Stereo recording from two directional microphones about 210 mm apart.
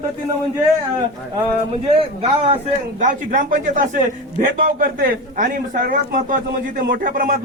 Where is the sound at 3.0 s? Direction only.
40° right (ahead or behind).